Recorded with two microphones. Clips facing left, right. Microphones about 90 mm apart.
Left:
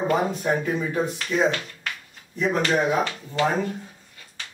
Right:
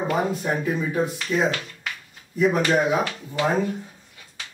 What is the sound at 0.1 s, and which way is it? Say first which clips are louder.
A man's voice: left 1 dB; centre (ahead or behind).